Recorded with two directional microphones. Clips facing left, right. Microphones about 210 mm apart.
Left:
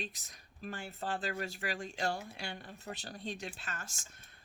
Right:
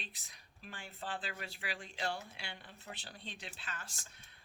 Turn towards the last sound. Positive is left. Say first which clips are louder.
# left 3 dB
turn(degrees=45)  # may be behind; listen again after turning